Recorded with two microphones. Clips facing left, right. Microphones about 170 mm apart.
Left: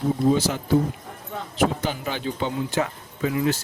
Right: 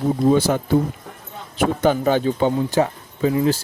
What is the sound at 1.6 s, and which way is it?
Speech, 50° right (ahead or behind).